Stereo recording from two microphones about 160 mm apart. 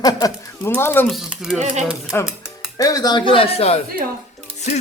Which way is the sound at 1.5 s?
45° right (ahead or behind).